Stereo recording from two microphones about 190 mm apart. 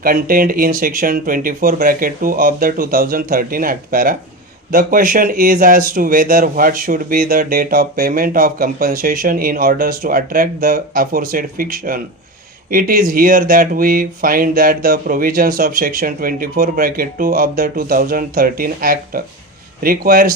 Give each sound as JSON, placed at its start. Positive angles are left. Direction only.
{"t": 0.0, "sound": "speech", "side_deg": -50}